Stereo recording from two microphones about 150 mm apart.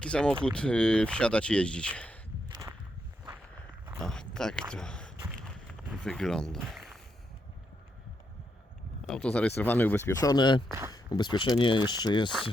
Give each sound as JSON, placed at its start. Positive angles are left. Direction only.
{"t": 0.0, "sound": "speech", "side_deg": 5}
{"t": 2.5, "sound": "walk", "side_deg": -20}
{"t": 4.0, "sound": "a sound", "side_deg": 5}
{"t": 4.7, "sound": "speech", "side_deg": 5}
{"t": 9.0, "sound": "speech", "side_deg": 5}
{"t": 10.2, "sound": "speech", "side_deg": 25}
{"t": 10.7, "sound": "speech", "side_deg": -20}
{"t": 10.9, "sound": "speech", "side_deg": 30}